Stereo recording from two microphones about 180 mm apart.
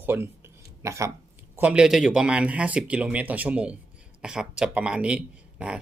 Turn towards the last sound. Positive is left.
turn(degrees=-5)  # may be behind; listen again after turning